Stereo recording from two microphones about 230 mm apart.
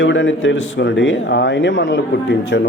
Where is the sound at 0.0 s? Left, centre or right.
Left.